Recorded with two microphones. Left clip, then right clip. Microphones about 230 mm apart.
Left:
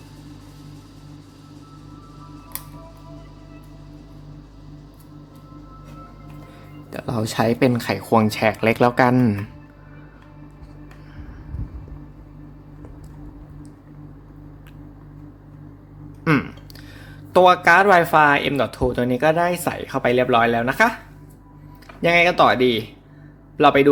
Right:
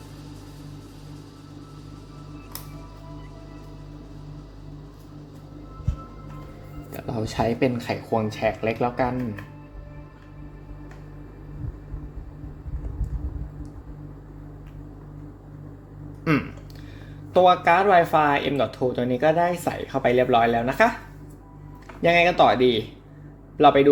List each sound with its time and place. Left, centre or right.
6.9 s speech: left
16.3 s a sound: left
17.3 s speech: left
22.0 s speech: centre